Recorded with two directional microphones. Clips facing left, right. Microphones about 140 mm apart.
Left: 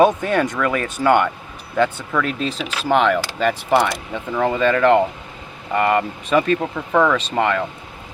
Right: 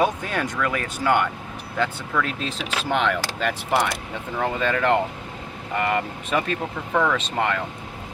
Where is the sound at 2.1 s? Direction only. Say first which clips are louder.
Left 3 dB; 80° left.